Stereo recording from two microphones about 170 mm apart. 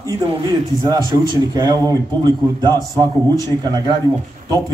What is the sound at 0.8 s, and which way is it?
Speech, 25° right (ahead or behind).